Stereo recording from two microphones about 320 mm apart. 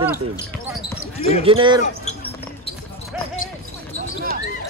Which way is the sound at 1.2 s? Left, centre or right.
Centre.